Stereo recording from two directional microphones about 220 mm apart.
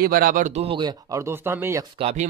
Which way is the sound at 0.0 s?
40° right (ahead or behind).